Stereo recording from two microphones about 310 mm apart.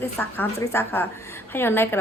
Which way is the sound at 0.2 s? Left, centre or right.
Centre.